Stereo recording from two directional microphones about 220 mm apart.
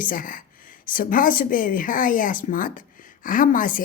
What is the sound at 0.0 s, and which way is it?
A woman's voice, 40° left (ahead or behind).